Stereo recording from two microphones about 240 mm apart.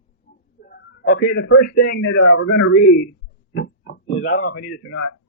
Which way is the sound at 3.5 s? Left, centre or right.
Left.